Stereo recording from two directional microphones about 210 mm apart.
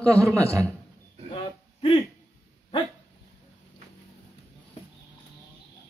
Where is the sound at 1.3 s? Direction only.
25° left (ahead or behind).